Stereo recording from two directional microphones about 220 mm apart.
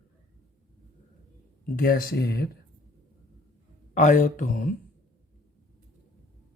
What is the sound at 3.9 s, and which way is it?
Speech, 35° left (ahead or behind).